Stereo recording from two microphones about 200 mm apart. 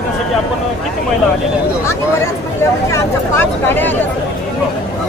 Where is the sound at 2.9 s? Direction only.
10° left (ahead or behind).